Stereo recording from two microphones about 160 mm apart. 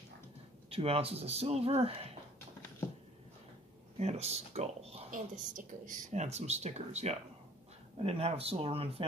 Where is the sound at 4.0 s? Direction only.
40° right (ahead or behind).